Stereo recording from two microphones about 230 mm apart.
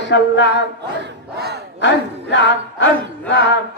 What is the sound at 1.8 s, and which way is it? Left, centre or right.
Speech, left.